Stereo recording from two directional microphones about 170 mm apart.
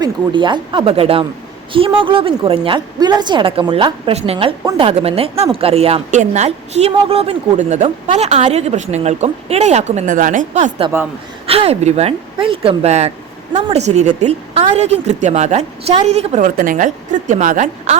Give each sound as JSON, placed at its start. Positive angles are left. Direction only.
{"t": 0.0, "sound": "speech", "side_deg": -25}
{"t": 11.4, "sound": "speech", "side_deg": -35}